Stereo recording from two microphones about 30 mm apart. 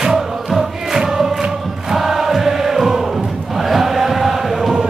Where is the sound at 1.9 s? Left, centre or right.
Centre.